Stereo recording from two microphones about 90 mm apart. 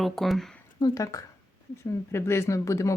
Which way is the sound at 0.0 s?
Centre (ahead or behind).